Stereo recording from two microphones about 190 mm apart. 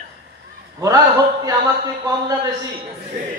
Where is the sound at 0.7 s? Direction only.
20° right (ahead or behind).